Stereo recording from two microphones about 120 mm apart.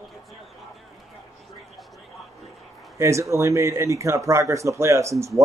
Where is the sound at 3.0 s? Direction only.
25° right (ahead or behind).